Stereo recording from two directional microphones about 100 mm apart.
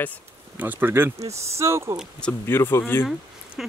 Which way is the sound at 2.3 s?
25° left (ahead or behind).